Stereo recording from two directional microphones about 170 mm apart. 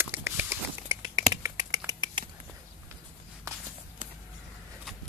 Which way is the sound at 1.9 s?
25° right (ahead or behind).